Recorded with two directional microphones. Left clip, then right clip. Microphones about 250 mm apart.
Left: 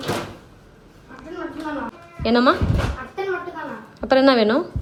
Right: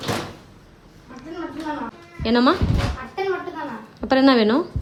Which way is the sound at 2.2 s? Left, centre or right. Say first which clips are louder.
Left 1 dB; centre.